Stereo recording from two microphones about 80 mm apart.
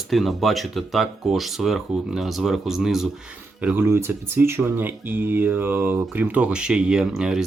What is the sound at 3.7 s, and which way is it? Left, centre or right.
Speech, right.